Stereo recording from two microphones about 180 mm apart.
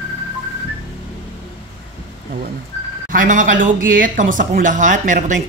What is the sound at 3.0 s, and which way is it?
Speech, 45° right (ahead or behind).